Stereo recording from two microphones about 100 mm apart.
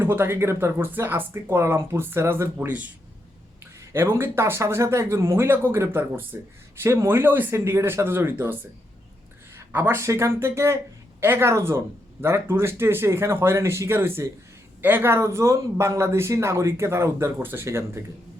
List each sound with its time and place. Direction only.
0.0 s speech: 25° right (ahead or behind)
2.6 s speech: 15° right (ahead or behind)
3.8 s speech: 25° right (ahead or behind)
9.6 s a sound: 20° right (ahead or behind)
10.0 s speech: 30° right (ahead or behind)